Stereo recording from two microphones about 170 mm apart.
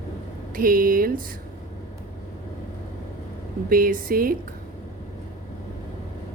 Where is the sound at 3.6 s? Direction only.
55° right (ahead or behind).